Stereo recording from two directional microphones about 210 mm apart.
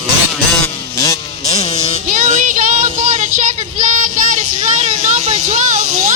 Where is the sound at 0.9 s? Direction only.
15° left (ahead or behind).